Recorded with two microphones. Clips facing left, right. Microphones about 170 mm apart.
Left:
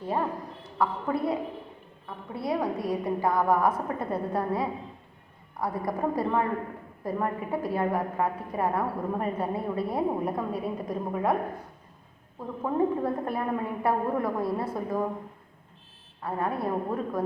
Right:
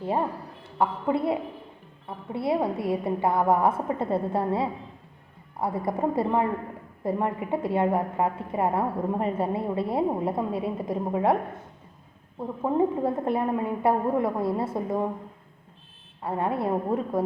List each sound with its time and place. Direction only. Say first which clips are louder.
0.8 s a woman's voice: right 3 dB; 25° right (ahead or behind)
16.2 s a woman's voice: right 3 dB; 25° right (ahead or behind)